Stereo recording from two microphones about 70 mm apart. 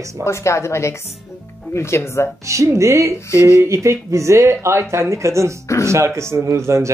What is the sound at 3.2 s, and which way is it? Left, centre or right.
Speech, left.